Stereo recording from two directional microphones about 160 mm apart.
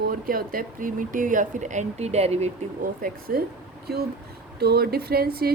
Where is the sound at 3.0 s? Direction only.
65° right (ahead or behind).